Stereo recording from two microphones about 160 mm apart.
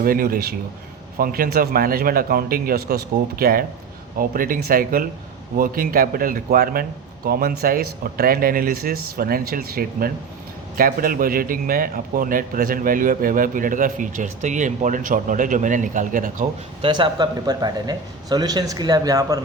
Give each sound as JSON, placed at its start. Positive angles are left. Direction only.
{"t": 0.0, "sound": "a man's voice", "side_deg": -65}
{"t": 16.8, "sound": "speech", "side_deg": -30}